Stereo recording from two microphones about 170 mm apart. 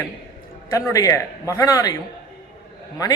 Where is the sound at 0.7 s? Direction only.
20° left (ahead or behind).